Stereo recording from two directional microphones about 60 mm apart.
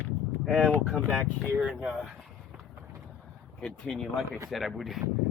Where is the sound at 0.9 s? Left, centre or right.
Centre.